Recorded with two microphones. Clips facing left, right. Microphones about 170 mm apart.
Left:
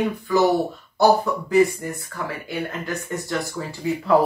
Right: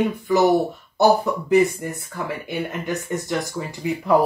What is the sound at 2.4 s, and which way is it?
Speech, 20° right (ahead or behind).